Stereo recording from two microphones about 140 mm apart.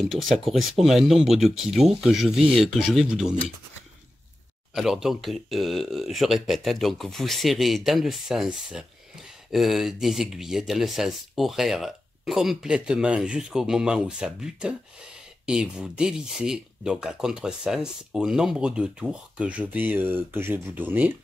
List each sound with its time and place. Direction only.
0.0 s speech: centre (ahead or behind)
4.7 s speech: 5° right (ahead or behind)